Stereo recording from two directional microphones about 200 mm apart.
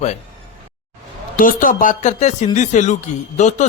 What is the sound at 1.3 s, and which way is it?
A man's voice, 40° left (ahead or behind).